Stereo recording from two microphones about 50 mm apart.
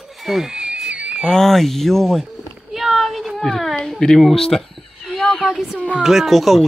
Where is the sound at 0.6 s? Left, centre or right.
Right.